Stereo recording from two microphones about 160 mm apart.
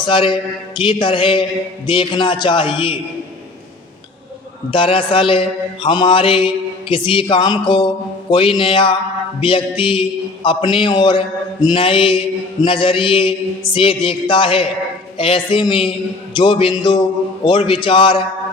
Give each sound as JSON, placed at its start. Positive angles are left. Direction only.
{"t": 0.0, "sound": "mantra", "side_deg": 30}
{"t": 4.7, "sound": "mantra", "side_deg": 35}